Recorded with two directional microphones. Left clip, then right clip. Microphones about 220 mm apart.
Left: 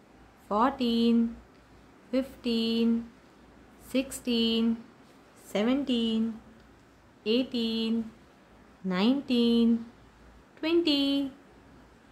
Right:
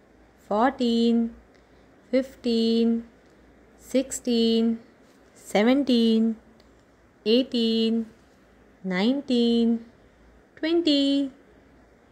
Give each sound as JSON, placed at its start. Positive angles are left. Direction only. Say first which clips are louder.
{"t": 0.5, "sound": "speech", "louder": "right 4 dB", "side_deg": -20}
{"t": 3.9, "sound": "a woman's voice", "louder": "right 5 dB", "side_deg": -20}
{"t": 7.2, "sound": "speech", "louder": "right 6 dB", "side_deg": -25}